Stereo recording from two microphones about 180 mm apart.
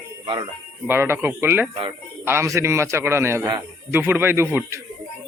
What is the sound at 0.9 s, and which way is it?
Speech, 15° right (ahead or behind).